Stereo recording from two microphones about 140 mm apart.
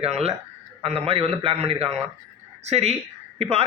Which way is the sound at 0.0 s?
50° right (ahead or behind).